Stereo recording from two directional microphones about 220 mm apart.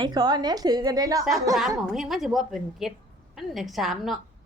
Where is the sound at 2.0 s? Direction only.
Centre (ahead or behind).